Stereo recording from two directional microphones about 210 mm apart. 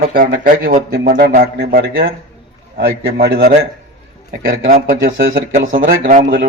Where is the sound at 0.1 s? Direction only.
45° right (ahead or behind).